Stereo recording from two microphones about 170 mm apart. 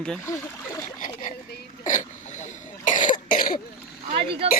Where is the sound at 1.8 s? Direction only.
45° left (ahead or behind).